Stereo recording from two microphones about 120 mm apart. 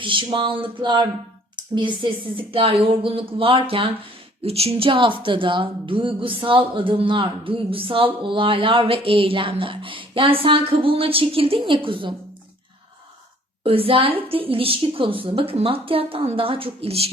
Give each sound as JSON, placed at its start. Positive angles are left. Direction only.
{"t": 0.0, "sound": "a woman's voice", "side_deg": -45}
{"t": 13.7, "sound": "a woman's voice", "side_deg": -50}